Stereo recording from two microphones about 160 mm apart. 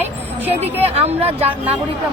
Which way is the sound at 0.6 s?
40° right (ahead or behind).